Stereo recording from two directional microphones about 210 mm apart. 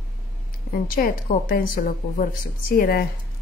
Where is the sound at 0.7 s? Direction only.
45° left (ahead or behind).